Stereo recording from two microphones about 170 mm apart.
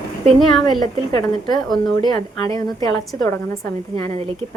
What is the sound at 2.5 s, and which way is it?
A woman's voice, 20° left (ahead or behind).